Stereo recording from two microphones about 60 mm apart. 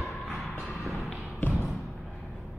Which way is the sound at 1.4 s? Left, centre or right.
Left.